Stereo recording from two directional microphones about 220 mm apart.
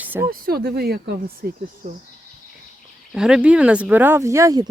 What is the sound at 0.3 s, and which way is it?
Speech, 45° right (ahead or behind).